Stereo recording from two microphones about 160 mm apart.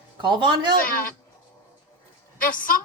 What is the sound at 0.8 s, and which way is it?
Speech, 60° left (ahead or behind).